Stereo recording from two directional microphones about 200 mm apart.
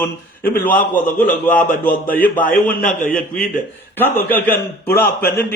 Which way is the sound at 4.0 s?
10° left (ahead or behind).